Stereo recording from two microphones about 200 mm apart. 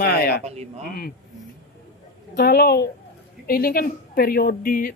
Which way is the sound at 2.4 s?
50° left (ahead or behind).